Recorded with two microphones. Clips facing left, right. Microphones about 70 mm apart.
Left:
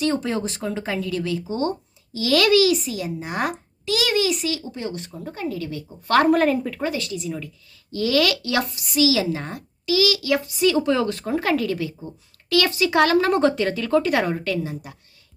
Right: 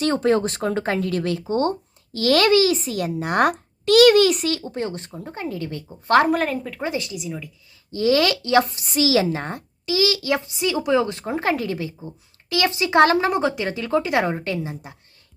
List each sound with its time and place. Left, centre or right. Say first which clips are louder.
0.0 s a child's voice: right 4 dB; right
2.4 s a woman's voice: left 2 dB; right
2.9 s a child's voice: right 5 dB; right
4.9 s a woman's voice: even; right
6.2 s speech: left 4 dB; centre
6.8 s speech: left 1 dB; right
7.2 s speech: left 2 dB; centre
7.9 s speech: right 2 dB; right
13.3 s speech: left 3 dB; centre
13.7 s speech: left 2 dB; right